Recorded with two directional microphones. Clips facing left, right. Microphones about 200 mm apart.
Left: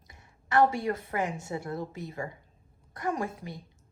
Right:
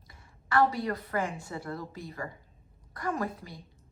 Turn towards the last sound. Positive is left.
turn(degrees=25)  # may be behind; listen again after turning